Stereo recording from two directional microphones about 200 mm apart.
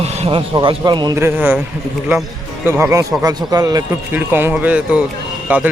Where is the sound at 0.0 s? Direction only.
30° right (ahead or behind); by 1.5 s 10° right (ahead or behind).